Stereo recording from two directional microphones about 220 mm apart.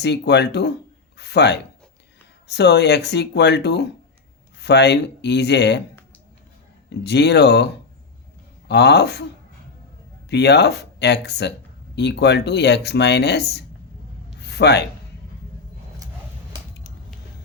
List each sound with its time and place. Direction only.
0.0 s speech: 50° left (ahead or behind)
1.1 s a sound: 50° left (ahead or behind)
2.5 s speech: 50° left (ahead or behind)
6.9 s speech: 50° left (ahead or behind)
10.2 s speech: 50° left (ahead or behind)
14.3 s a sound: 50° left (ahead or behind)